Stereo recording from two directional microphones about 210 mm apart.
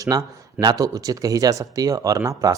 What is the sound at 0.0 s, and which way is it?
Speech, 15° right (ahead or behind).